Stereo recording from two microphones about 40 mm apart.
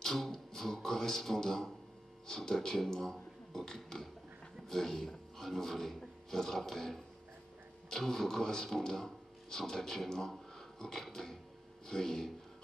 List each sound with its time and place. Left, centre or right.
0.0 s music: centre
2.2 s speech: centre